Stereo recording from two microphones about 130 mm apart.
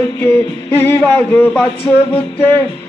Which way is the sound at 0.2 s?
20° left (ahead or behind).